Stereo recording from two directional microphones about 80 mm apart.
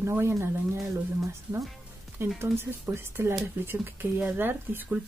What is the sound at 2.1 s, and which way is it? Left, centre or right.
Speech, right.